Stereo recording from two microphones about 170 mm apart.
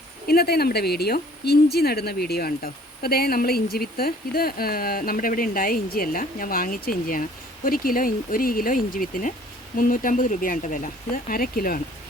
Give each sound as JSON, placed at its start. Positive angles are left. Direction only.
{"t": 0.3, "sound": "speech", "side_deg": 65}